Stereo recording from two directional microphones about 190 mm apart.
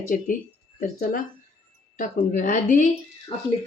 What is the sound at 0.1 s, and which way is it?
A woman's voice, 45° left (ahead or behind).